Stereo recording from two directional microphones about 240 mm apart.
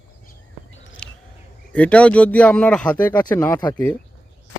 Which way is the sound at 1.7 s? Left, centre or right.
Centre.